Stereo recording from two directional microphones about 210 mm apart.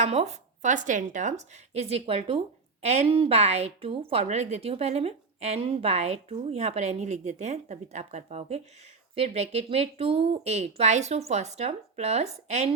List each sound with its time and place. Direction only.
0.0 s a woman's voice: 30° right (ahead or behind)